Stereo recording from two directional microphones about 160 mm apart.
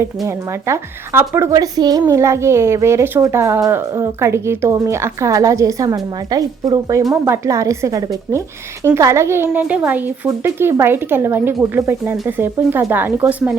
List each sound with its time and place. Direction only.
0.0 s a woman's voice: 15° right (ahead or behind)